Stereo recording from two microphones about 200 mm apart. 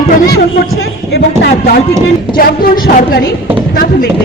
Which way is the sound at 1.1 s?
55° left (ahead or behind).